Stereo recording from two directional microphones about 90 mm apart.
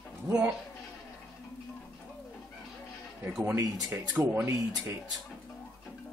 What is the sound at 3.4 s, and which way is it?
Speech, 30° right (ahead or behind).